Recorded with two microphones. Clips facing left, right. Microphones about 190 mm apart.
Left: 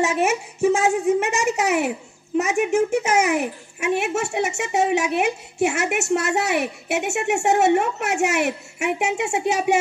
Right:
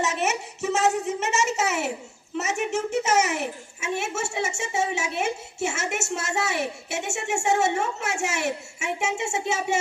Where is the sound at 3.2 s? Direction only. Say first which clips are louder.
Left 5 dB; 60° left (ahead or behind).